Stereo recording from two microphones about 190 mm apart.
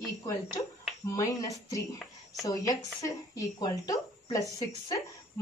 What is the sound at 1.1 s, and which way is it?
A woman's voice, 20° left (ahead or behind).